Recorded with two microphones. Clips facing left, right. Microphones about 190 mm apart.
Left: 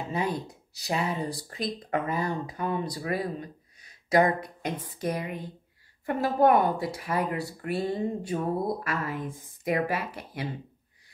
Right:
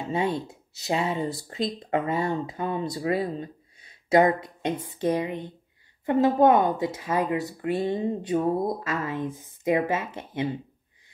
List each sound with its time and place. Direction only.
0.1 s speech: 25° right (ahead or behind)